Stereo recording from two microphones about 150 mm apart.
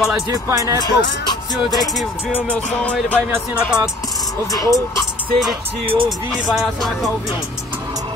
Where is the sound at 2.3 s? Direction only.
10° left (ahead or behind).